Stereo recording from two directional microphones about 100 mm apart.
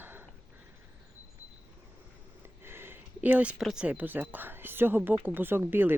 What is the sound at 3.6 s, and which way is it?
Speech, 10° right (ahead or behind).